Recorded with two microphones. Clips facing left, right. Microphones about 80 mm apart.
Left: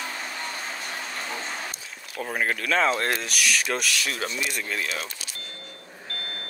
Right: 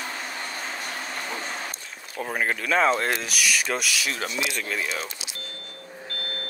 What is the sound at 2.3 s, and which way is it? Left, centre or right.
Speech, centre.